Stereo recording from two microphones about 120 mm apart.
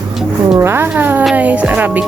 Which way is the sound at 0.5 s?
20° right (ahead or behind).